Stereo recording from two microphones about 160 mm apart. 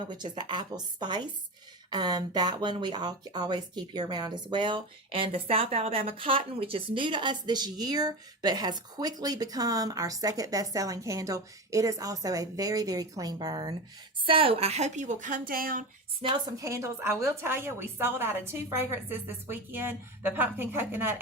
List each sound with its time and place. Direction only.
0.1 s speech: 30° right (ahead or behind)
14.3 s speech: 35° right (ahead or behind); by 15.8 s 65° right (ahead or behind)
16.6 s a woman's voice: 20° right (ahead or behind)